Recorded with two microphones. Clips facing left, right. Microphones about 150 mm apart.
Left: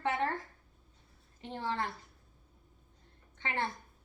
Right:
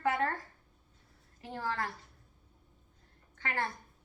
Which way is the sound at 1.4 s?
25° left (ahead or behind).